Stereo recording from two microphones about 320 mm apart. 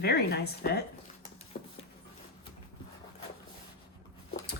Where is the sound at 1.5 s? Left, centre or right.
Left.